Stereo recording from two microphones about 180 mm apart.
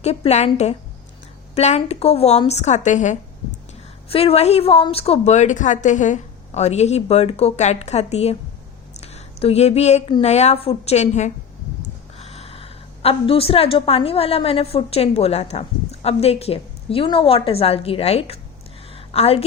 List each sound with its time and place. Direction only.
0.0 s a woman's voice: 35° left (ahead or behind)